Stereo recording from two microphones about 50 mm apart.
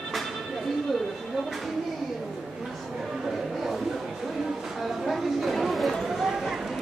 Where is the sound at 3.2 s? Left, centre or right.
Centre.